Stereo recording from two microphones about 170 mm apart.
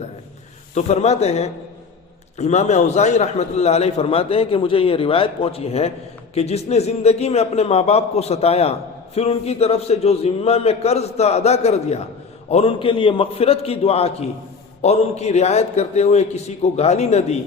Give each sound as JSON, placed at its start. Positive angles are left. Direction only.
{"t": 0.7, "sound": "a man's voice", "side_deg": 40}